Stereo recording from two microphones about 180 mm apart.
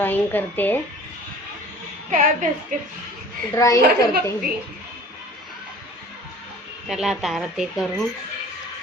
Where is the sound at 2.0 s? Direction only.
45° right (ahead or behind).